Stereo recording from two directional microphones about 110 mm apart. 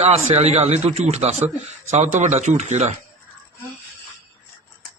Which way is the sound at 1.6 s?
90° right.